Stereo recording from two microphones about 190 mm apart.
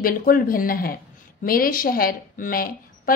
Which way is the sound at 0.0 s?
50° left (ahead or behind).